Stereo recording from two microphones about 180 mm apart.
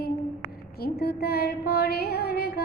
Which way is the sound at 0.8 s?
60° left (ahead or behind).